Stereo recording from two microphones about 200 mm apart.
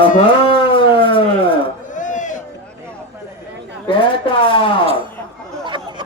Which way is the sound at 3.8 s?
25° left (ahead or behind).